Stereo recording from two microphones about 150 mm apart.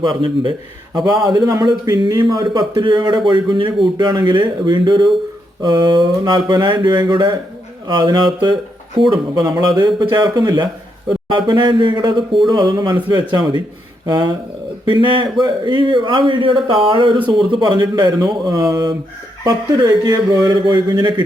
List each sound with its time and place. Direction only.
0.0 s speech: 30° right (ahead or behind)